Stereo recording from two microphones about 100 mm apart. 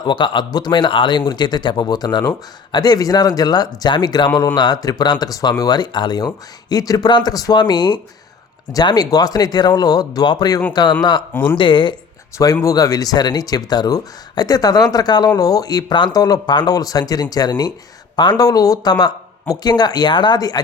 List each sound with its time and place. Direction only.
0.0 s speech: 50° left (ahead or behind)
12.6 s speech: 40° left (ahead or behind)